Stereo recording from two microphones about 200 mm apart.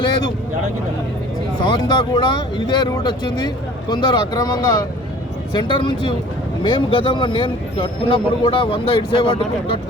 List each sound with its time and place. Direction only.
1.6 s speech: 20° left (ahead or behind)